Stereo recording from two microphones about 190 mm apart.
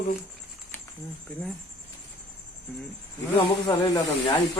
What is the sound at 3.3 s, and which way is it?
Speech, 20° left (ahead or behind).